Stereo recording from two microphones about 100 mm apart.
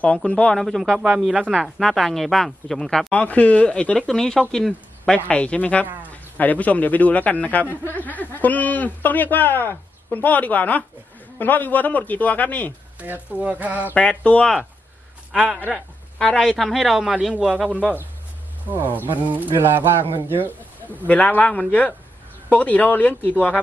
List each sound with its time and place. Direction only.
0.0 s speech: 10° left (ahead or behind)
0.9 s a sound: 5° right (ahead or behind)
1.5 s a man's voice: 5° left (ahead or behind)
13.0 s a sound: 15° right (ahead or behind)
13.9 s speech: 10° left (ahead or behind)
15.7 s a man's voice: 10° left (ahead or behind)
18.7 s speech: 20° right (ahead or behind)
19.2 s a sound: 15° right (ahead or behind)
20.1 s speech: 20° right (ahead or behind)
21.1 s speech: 15° left (ahead or behind)